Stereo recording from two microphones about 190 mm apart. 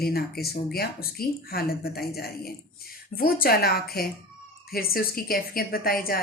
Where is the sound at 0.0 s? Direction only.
55° left (ahead or behind).